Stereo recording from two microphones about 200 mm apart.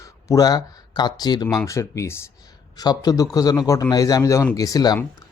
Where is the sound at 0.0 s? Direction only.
15° left (ahead or behind).